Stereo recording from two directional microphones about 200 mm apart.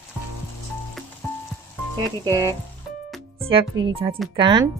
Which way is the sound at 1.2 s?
10° left (ahead or behind).